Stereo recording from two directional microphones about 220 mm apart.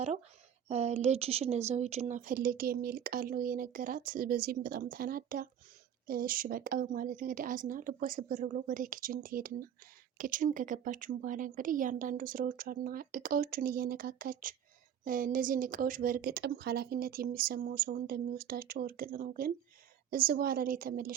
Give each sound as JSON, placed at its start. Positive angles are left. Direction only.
{"t": 0.7, "sound": "a woman's voice", "side_deg": -30}